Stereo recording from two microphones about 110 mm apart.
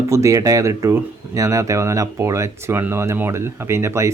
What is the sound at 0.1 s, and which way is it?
Speech, 30° right (ahead or behind).